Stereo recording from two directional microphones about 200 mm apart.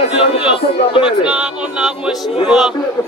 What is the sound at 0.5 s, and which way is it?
Speech, 25° left (ahead or behind).